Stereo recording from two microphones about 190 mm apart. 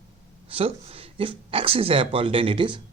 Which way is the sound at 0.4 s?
30° right (ahead or behind).